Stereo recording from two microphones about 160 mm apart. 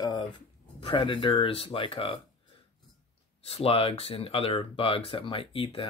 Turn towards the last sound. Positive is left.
turn(degrees=35)  # may be behind; listen again after turning